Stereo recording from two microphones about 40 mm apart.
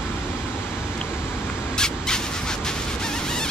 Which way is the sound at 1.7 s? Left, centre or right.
Centre.